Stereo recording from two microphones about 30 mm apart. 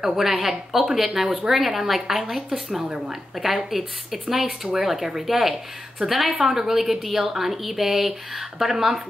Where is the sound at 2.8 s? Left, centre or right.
Right.